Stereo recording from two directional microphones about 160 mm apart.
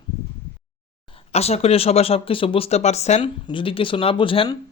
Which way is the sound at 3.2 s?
30° left (ahead or behind).